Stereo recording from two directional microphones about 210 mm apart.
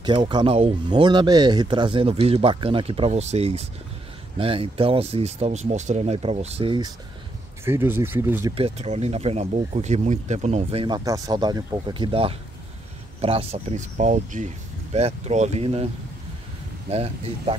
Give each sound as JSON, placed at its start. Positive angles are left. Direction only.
{"t": 0.0, "sound": "speech", "side_deg": -20}
{"t": 7.6, "sound": "speech", "side_deg": -10}
{"t": 8.5, "sound": "speech", "side_deg": -30}
{"t": 11.1, "sound": "speech", "side_deg": -15}
{"t": 16.9, "sound": "speech", "side_deg": -30}